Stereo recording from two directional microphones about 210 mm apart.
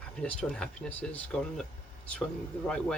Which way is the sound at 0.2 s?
5° left (ahead or behind).